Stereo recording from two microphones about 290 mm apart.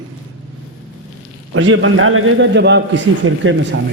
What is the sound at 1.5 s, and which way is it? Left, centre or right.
A man's voice, right.